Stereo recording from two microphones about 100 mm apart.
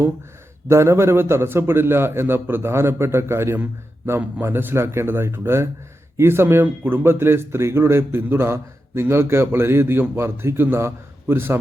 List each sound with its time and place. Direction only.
0.7 s a man's voice: 25° right (ahead or behind)